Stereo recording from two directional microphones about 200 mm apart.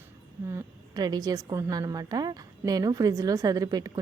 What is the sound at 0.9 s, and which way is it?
Speech, 20° right (ahead or behind).